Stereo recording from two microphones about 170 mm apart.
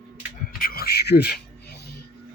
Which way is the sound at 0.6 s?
65° left (ahead or behind).